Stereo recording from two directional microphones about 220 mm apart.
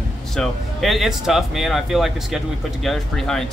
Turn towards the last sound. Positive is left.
turn(degrees=0)  # may be behind; listen again after turning